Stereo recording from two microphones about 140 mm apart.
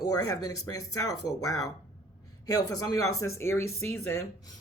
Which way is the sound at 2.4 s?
25° left (ahead or behind).